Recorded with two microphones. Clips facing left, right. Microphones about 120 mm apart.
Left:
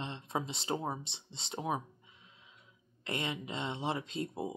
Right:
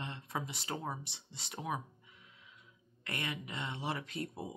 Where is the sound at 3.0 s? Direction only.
25° left (ahead or behind).